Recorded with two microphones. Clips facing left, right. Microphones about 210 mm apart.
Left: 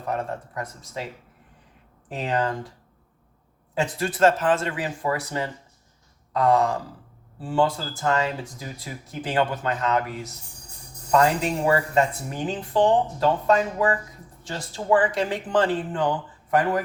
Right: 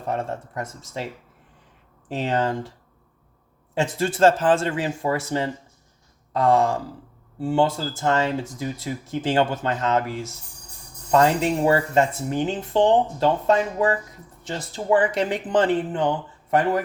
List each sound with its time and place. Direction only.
0.1 s speech: 25° right (ahead or behind)
2.0 s speech: 25° right (ahead or behind)
3.8 s speech: 25° right (ahead or behind)